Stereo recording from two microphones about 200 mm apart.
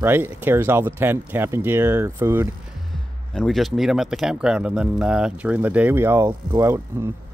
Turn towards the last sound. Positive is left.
turn(degrees=-15)  # may be behind; listen again after turning